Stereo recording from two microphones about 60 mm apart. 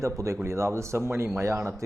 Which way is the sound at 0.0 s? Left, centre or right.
Right.